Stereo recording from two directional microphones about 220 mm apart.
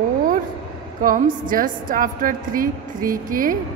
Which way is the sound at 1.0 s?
35° right (ahead or behind).